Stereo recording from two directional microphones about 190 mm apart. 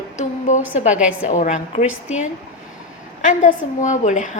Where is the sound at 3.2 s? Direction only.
40° left (ahead or behind).